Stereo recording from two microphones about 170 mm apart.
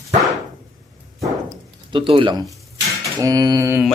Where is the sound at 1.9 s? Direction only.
30° right (ahead or behind).